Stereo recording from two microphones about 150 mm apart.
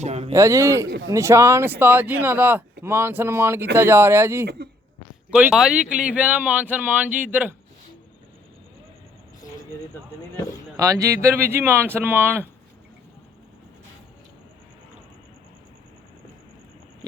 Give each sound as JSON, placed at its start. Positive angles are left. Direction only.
{"t": 0.0, "sound": "a sound", "side_deg": -45}
{"t": 0.3, "sound": "speech", "side_deg": -20}
{"t": 4.4, "sound": "speech", "side_deg": -90}
{"t": 5.3, "sound": "speech", "side_deg": -5}
{"t": 10.8, "sound": "speech", "side_deg": -20}